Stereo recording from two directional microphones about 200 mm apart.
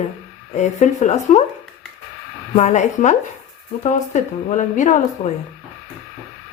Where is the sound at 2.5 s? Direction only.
35° left (ahead or behind).